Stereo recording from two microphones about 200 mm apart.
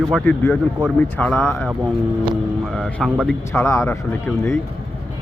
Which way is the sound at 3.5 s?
15° left (ahead or behind).